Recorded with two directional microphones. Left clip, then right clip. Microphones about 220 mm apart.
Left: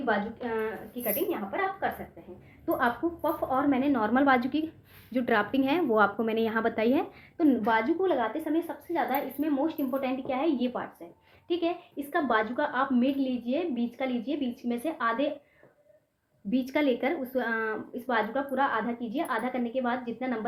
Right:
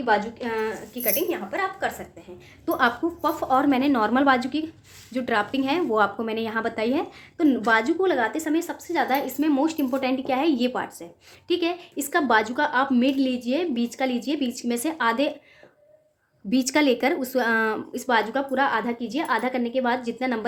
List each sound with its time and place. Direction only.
0.0 s a woman's voice: 50° right (ahead or behind); by 4.1 s 35° right (ahead or behind)
4.1 s a woman's voice: 15° right (ahead or behind); by 7.0 s centre (ahead or behind)
7.3 s speech: 15° right (ahead or behind); by 15.3 s 45° right (ahead or behind)
16.5 s speech: 40° right (ahead or behind)